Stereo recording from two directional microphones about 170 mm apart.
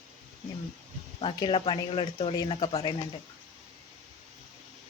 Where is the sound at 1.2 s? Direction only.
30° left (ahead or behind).